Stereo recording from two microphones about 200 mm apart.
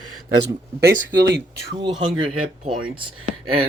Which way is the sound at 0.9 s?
50° right (ahead or behind).